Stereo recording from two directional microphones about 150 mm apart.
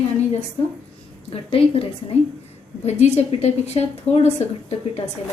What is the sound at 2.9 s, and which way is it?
A woman's voice, 50° left (ahead or behind).